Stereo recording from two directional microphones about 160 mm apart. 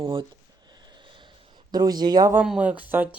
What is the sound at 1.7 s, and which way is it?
Speech, 25° right (ahead or behind).